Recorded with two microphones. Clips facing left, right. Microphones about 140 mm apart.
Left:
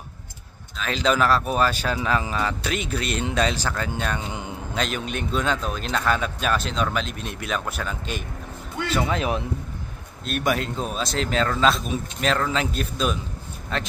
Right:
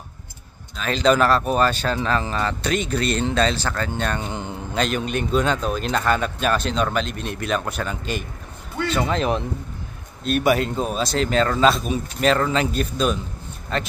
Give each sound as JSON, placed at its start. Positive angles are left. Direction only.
{"t": 0.7, "sound": "a man's voice", "side_deg": 0}